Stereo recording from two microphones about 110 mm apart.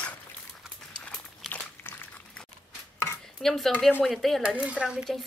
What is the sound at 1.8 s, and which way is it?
Dog, 20° left (ahead or behind).